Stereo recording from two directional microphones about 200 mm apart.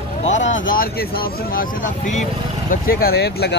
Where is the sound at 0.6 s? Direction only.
50° left (ahead or behind).